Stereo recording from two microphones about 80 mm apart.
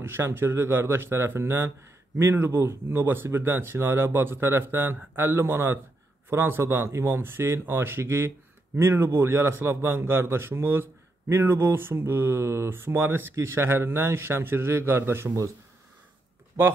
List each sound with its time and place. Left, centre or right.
0.0 s a man's voice: right